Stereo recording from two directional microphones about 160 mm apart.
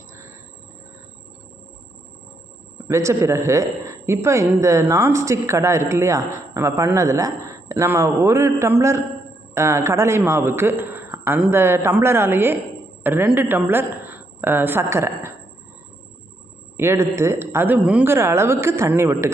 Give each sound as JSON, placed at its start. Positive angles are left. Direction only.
{"t": 2.8, "sound": "a man's voice", "side_deg": -20}
{"t": 16.7, "sound": "a man's voice", "side_deg": -15}